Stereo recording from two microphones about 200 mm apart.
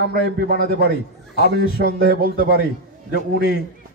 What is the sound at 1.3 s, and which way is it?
Speech, 55° left (ahead or behind).